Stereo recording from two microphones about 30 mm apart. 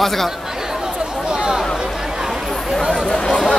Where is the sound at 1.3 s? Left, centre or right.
Right.